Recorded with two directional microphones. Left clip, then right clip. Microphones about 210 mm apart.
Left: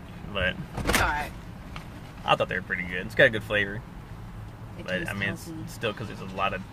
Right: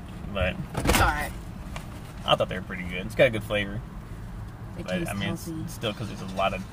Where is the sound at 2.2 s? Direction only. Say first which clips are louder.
Even; 20° left (ahead or behind).